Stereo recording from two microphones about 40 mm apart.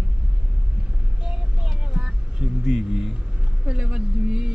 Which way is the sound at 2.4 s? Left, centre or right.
Centre.